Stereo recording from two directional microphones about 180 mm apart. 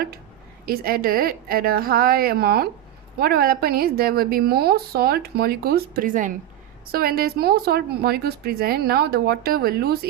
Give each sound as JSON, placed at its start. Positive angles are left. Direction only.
{"t": 0.6, "sound": "a woman's voice", "side_deg": -55}